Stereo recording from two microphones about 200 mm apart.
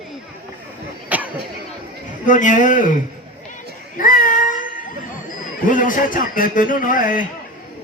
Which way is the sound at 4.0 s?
45° left (ahead or behind).